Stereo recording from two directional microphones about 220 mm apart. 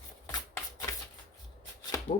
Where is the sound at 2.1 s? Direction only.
40° left (ahead or behind).